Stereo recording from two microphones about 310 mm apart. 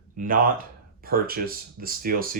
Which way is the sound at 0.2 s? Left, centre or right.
Right.